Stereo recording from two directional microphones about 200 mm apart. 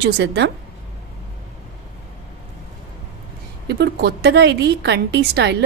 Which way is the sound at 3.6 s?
55° right (ahead or behind).